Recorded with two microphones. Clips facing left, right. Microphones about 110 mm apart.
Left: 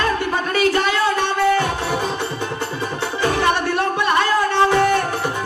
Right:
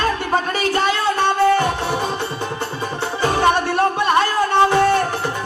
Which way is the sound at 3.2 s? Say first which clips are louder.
Right 1 dB; 30° right (ahead or behind).